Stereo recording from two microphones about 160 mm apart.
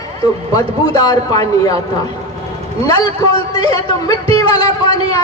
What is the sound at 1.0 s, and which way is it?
Speech, 25° left (ahead or behind).